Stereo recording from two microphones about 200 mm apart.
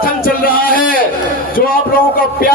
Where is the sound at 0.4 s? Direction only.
45° left (ahead or behind).